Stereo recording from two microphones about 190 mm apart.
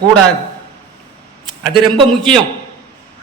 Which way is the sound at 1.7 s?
25° right (ahead or behind).